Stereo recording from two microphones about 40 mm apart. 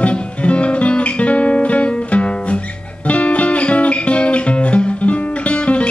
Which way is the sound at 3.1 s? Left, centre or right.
Left.